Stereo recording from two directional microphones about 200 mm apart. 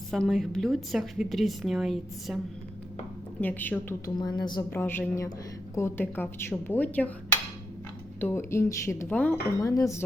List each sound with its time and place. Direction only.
0.1 s a woman's voice: centre (ahead or behind)
3.4 s speech: 10° left (ahead or behind)
4.1 s speech: 20° left (ahead or behind)
8.2 s speech: 10° left (ahead or behind)